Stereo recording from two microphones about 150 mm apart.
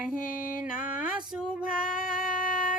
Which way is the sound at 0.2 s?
65° left (ahead or behind).